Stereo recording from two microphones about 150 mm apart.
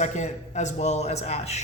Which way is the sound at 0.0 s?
50° left (ahead or behind).